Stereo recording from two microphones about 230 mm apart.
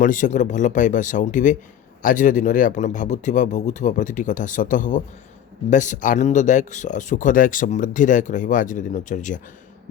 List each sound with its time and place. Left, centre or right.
0.0 s speech: left